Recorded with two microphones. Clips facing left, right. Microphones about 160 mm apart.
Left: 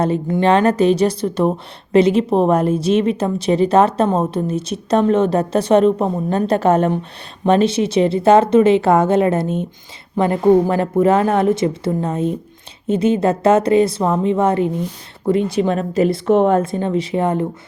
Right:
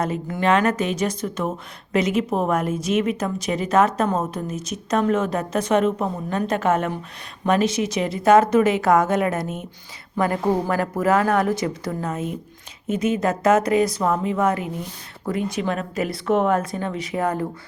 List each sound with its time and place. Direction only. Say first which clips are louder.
0.0 s speech: left 6 dB; 30° left (ahead or behind)